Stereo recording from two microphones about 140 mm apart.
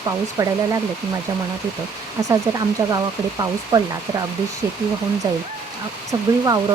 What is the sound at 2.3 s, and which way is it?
A woman's voice, 25° right (ahead or behind).